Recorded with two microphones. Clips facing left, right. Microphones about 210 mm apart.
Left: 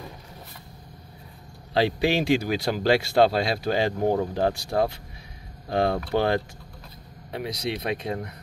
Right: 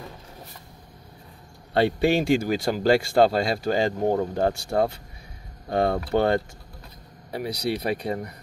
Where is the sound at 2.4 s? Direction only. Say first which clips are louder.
Right 2 dB; 5° left (ahead or behind).